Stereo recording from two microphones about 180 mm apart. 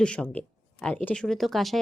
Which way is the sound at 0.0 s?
5° left (ahead or behind).